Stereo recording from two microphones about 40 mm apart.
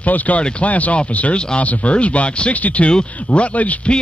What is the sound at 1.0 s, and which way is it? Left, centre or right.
Speech, left.